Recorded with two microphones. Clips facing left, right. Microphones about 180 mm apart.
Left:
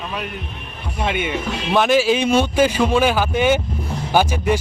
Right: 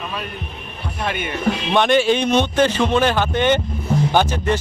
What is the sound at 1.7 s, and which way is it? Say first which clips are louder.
Speech: left 1 dB; 5° left (ahead or behind).